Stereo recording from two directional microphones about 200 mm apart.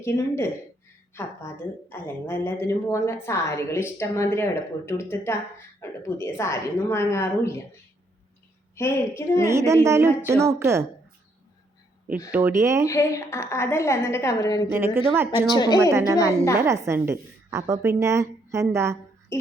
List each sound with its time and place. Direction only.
0.0 s a woman's voice: 15° left (ahead or behind)
8.7 s a woman's voice: 15° left (ahead or behind)
9.5 s a woman's voice: 15° right (ahead or behind)
12.3 s a woman's voice: 10° right (ahead or behind)
12.9 s a woman's voice: 15° left (ahead or behind)
14.7 s a woman's voice: 10° right (ahead or behind)
15.5 s a woman's voice: 20° left (ahead or behind)
15.8 s a woman's voice: 15° right (ahead or behind)
19.3 s music: 15° left (ahead or behind)